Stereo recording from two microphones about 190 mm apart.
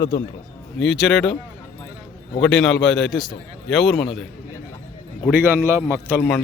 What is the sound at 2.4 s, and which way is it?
Speech, 5° left (ahead or behind).